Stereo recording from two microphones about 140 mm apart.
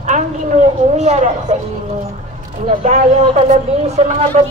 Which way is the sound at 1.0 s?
55° right (ahead or behind).